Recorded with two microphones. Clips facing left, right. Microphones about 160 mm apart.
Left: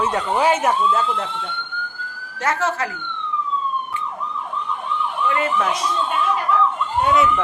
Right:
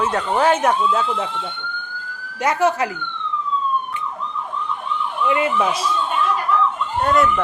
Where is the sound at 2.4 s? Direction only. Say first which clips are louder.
Right 4 dB; 15° right (ahead or behind).